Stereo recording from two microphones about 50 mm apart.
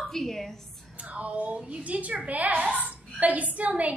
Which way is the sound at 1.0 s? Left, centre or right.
Right.